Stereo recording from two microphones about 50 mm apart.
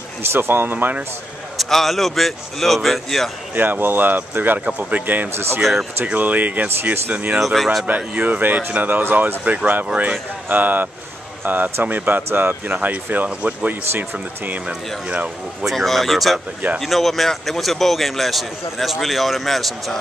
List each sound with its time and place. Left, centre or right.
0.2 s speech: right
1.6 s a man's voice: centre
3.5 s speech: right
5.6 s a man's voice: centre
6.1 s speech: right
7.3 s a man's voice: centre
8.2 s speech: right
9.4 s speech: right
12.2 s speech: right
12.7 s speech: right
15.0 s speech: right
15.7 s a man's voice: centre